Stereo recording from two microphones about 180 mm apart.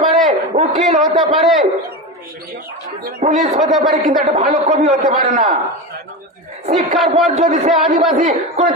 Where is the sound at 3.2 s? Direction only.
45° right (ahead or behind).